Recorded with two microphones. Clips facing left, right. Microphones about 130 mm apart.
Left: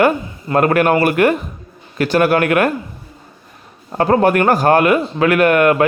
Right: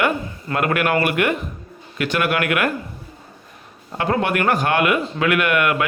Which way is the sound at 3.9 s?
40° left (ahead or behind).